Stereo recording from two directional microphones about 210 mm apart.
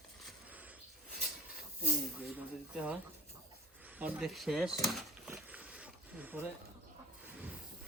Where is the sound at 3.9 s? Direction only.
5° right (ahead or behind).